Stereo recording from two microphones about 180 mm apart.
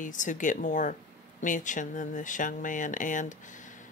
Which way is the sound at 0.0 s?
45° left (ahead or behind).